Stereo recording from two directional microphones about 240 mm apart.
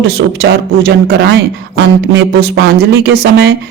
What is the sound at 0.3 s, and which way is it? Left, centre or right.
Speech, right.